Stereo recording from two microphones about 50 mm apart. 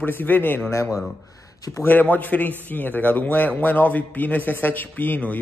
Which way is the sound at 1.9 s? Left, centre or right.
Left.